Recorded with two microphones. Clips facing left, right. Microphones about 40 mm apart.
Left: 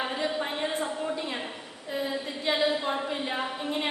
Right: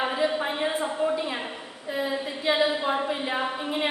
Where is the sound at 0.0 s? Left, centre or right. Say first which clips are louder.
Right 4 dB; centre.